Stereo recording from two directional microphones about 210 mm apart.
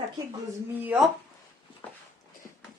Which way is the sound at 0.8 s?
5° right (ahead or behind).